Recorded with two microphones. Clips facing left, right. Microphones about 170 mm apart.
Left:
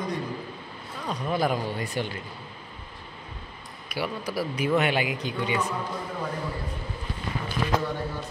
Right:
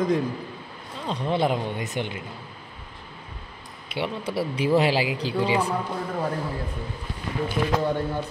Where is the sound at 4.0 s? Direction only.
25° right (ahead or behind).